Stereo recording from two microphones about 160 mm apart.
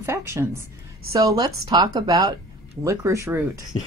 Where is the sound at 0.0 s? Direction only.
15° right (ahead or behind).